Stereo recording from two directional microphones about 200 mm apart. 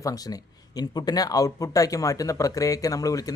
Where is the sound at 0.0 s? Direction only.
20° left (ahead or behind).